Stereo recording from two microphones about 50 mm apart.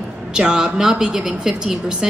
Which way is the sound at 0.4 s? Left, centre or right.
Centre.